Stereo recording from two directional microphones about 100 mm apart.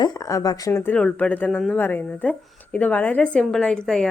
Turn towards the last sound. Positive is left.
turn(degrees=5)  # may be behind; listen again after turning